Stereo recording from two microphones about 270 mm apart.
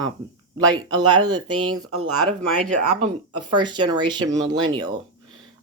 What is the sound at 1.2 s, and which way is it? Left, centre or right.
Speech, right.